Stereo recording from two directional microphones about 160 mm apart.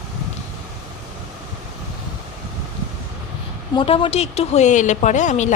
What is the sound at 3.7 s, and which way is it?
Speech, 35° left (ahead or behind).